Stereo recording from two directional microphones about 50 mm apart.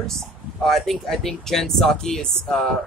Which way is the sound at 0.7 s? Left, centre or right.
Centre.